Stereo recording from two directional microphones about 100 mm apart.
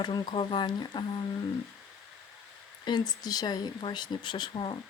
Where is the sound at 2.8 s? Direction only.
45° left (ahead or behind).